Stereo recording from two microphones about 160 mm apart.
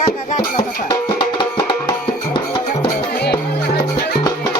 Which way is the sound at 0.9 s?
30° left (ahead or behind).